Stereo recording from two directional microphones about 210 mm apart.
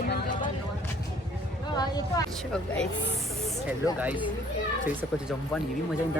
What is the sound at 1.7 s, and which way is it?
Speech, 20° left (ahead or behind).